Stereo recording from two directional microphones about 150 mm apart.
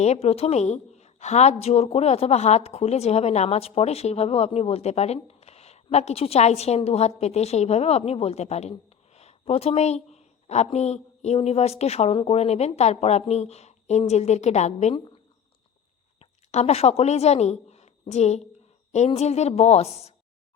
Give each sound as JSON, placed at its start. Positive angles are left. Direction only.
{"t": 0.0, "sound": "a woman's voice", "side_deg": 45}
{"t": 14.9, "sound": "speech", "side_deg": 35}
{"t": 16.5, "sound": "a woman's voice", "side_deg": 45}